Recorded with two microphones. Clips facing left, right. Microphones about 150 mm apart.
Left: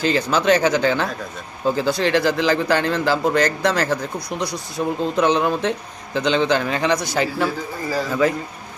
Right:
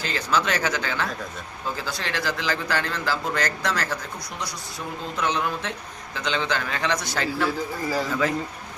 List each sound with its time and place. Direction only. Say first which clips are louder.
0.0 s a man's voice: left 6 dB; 20° left (ahead or behind)